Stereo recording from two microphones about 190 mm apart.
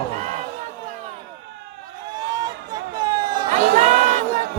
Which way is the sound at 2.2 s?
20° right (ahead or behind).